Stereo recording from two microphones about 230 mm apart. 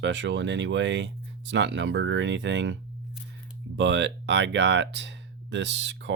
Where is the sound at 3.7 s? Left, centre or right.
Right.